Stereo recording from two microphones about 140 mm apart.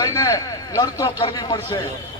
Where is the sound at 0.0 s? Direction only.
25° left (ahead or behind).